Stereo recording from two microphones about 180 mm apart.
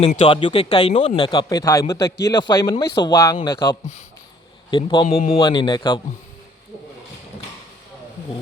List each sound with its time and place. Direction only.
0.0 s speech: 35° left (ahead or behind)